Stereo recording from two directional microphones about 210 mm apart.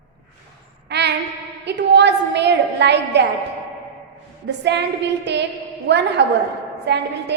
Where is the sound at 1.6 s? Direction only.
55° right (ahead or behind).